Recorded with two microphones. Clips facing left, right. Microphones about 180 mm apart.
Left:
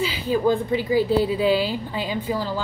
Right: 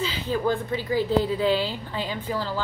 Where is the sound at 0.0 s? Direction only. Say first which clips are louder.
Left 4 dB; 10° left (ahead or behind).